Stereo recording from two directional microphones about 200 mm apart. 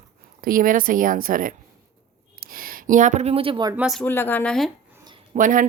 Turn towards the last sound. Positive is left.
turn(degrees=-40)  # may be behind; listen again after turning